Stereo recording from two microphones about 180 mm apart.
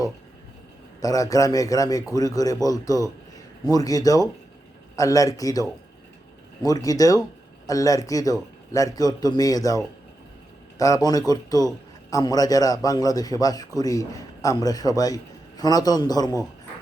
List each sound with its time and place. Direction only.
1.0 s a man's voice: 20° left (ahead or behind)